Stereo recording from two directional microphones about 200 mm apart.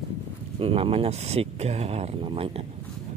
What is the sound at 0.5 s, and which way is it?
Speech, 25° right (ahead or behind).